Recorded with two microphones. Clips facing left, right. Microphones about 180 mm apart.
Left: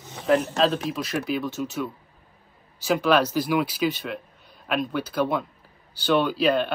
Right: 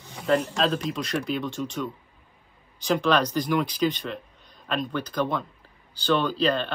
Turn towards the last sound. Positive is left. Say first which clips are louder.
# left 3 dB
turn(degrees=10)  # may be behind; listen again after turning